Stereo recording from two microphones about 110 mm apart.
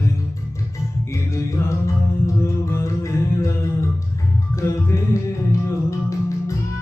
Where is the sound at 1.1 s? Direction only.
25° left (ahead or behind).